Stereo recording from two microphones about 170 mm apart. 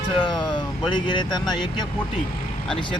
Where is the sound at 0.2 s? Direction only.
25° left (ahead or behind).